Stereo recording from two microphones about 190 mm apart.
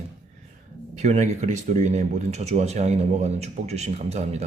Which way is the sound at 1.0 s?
35° right (ahead or behind).